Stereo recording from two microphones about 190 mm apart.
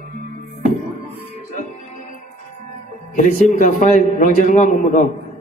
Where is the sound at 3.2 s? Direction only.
45° left (ahead or behind).